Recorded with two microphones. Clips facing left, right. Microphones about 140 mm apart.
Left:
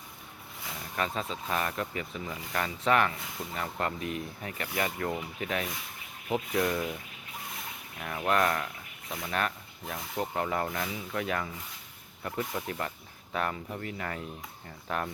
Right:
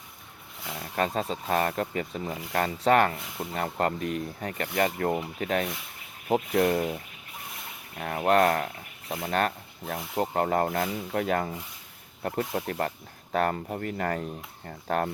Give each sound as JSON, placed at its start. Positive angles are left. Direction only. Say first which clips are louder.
{"t": 0.9, "sound": "speech", "louder": "right 5 dB", "side_deg": -40}
{"t": 9.2, "sound": "rub", "louder": "right 5 dB", "side_deg": -35}
{"t": 10.2, "sound": "speech", "louder": "right 6 dB", "side_deg": -45}